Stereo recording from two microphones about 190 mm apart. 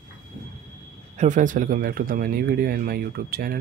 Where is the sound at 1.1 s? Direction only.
40° right (ahead or behind).